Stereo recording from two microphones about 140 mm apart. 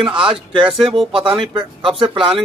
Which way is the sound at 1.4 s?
35° right (ahead or behind).